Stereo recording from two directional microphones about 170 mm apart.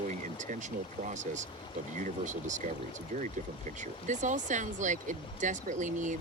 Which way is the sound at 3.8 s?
45° right (ahead or behind).